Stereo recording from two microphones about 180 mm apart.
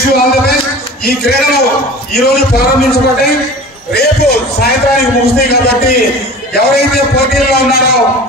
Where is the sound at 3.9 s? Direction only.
60° left (ahead or behind).